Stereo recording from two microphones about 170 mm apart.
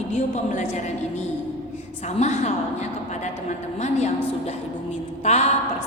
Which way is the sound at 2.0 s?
40° left (ahead or behind).